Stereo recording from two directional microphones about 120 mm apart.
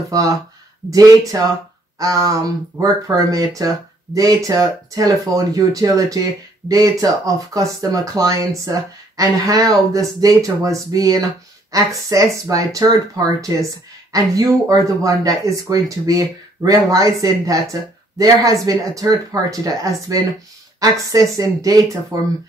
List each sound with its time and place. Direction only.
0.1 s speech: 30° right (ahead or behind)